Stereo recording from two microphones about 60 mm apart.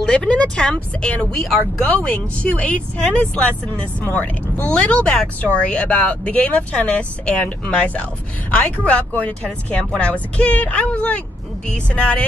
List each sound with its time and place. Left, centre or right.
0.0 s speech: centre
1.3 s speech: centre
2.0 s speech: left
4.0 s speech: left
5.0 s speech: centre